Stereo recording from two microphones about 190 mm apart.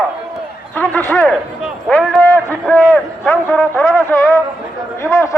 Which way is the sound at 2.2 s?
5° left (ahead or behind).